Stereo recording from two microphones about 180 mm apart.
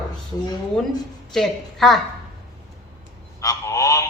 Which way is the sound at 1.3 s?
Centre (ahead or behind).